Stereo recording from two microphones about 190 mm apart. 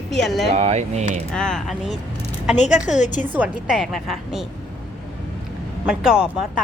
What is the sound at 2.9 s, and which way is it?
Speech, 40° left (ahead or behind).